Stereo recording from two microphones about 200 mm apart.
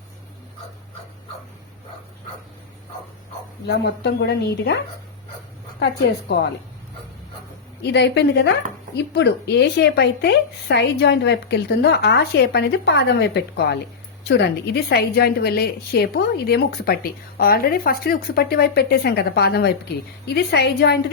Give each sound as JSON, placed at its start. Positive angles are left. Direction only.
{"t": 3.7, "sound": "speech", "side_deg": 60}
{"t": 5.8, "sound": "speech", "side_deg": 55}
{"t": 7.8, "sound": "a woman's voice", "side_deg": 60}